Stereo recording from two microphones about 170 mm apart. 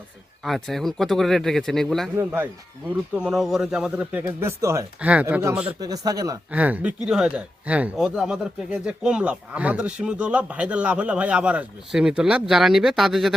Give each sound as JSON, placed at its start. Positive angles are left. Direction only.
{"t": 0.4, "sound": "speech", "side_deg": 0}
{"t": 2.1, "sound": "speech", "side_deg": -15}
{"t": 6.5, "sound": "speech", "side_deg": -10}